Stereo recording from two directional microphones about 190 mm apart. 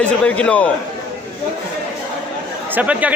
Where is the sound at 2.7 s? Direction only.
5° right (ahead or behind).